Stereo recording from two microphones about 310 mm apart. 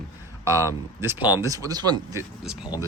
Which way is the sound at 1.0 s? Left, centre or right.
Centre.